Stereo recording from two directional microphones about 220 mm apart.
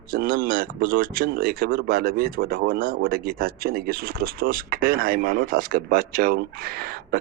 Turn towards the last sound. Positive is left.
turn(degrees=-45)  # may be behind; listen again after turning